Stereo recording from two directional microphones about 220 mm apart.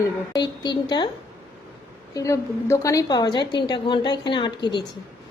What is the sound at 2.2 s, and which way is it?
A woman's voice, 15° left (ahead or behind).